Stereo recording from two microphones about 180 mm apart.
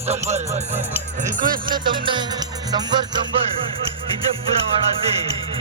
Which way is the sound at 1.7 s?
25° right (ahead or behind).